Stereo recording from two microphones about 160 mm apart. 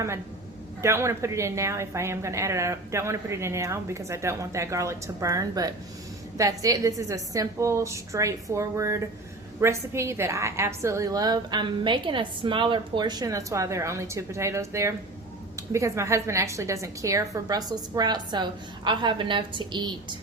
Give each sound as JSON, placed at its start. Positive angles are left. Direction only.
{"t": 0.8, "sound": "a woman's voice", "side_deg": -15}